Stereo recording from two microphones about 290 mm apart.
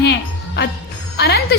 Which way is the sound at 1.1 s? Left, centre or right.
Left.